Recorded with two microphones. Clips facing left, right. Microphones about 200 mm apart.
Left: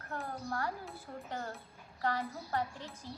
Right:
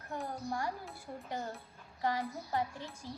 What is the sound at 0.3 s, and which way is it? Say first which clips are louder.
A child's voice: even; 15° right (ahead or behind).